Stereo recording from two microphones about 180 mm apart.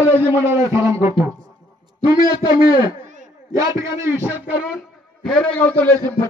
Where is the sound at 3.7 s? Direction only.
15° right (ahead or behind).